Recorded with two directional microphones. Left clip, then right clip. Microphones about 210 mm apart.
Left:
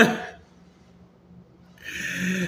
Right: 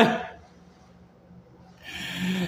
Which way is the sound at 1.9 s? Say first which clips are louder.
Left 4 dB; 50° right (ahead or behind).